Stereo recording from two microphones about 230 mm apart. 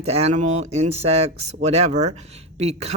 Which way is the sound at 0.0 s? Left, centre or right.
Right.